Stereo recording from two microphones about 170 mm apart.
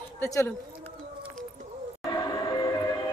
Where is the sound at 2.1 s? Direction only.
25° left (ahead or behind).